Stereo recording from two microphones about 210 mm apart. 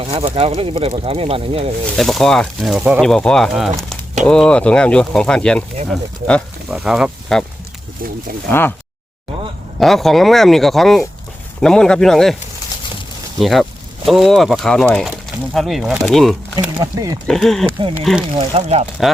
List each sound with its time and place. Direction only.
0.0 s speech: 25° right (ahead or behind)
2.0 s speech: centre (ahead or behind)
8.4 s speech: 10° left (ahead or behind)
9.8 s speech: centre (ahead or behind)
13.4 s speech: centre (ahead or behind)
16.7 s speech: 15° right (ahead or behind)
17.2 s speech: centre (ahead or behind)
18.3 s speech: 30° right (ahead or behind)